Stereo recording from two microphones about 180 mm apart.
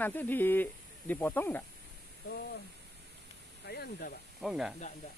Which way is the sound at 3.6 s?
60° left (ahead or behind).